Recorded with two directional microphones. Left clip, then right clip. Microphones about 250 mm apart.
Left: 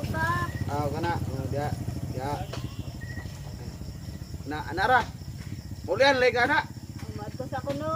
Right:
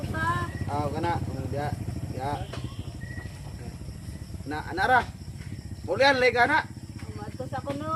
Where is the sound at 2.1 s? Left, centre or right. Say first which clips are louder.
Right 1 dB; centre.